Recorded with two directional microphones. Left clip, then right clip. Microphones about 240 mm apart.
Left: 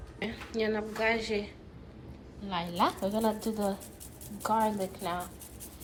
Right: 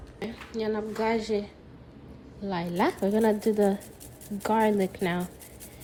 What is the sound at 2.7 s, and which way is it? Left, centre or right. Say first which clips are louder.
Speech: right 3 dB; right.